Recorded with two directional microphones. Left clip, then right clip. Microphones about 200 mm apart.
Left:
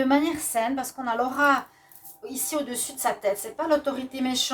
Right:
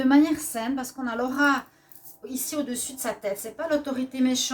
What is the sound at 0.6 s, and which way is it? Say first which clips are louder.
Speech: left 3 dB; 30° left (ahead or behind).